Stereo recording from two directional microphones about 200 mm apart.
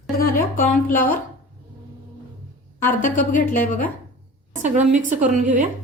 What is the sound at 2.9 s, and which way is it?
Speech, 40° left (ahead or behind).